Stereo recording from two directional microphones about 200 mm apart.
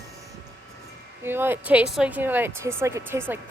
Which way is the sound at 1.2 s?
10° right (ahead or behind).